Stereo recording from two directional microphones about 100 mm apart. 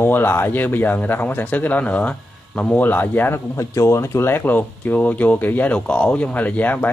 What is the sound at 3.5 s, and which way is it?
Speech, 30° left (ahead or behind).